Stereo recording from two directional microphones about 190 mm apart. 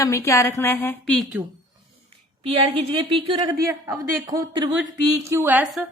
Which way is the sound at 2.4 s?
30° right (ahead or behind).